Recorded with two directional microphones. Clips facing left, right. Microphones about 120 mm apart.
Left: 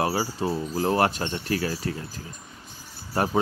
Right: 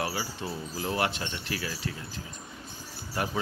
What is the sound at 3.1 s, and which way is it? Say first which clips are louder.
Speech: left 7 dB; 40° left (ahead or behind).